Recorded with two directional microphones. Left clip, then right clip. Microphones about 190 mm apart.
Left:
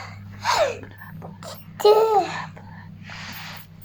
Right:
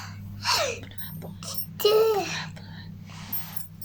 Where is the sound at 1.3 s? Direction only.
40° right (ahead or behind).